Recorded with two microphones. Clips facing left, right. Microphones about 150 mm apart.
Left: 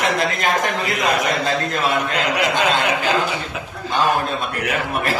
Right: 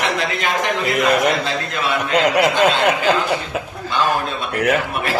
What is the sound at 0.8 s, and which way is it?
Speech, 50° right (ahead or behind).